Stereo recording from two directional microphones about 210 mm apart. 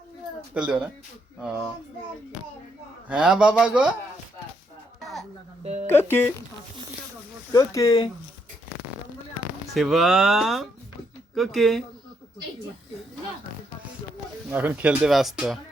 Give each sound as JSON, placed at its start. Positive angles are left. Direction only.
{"t": 0.5, "sound": "speech", "side_deg": -5}
{"t": 3.1, "sound": "speech", "side_deg": -5}
{"t": 5.6, "sound": "speech", "side_deg": -35}
{"t": 5.9, "sound": "speech", "side_deg": 10}
{"t": 7.5, "sound": "speech", "side_deg": 15}
{"t": 9.7, "sound": "speech", "side_deg": 0}
{"t": 14.5, "sound": "speech", "side_deg": -10}